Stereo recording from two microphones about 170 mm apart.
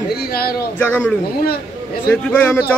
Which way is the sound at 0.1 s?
65° left (ahead or behind).